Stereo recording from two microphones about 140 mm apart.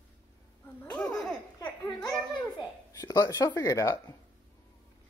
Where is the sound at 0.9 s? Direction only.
5° left (ahead or behind).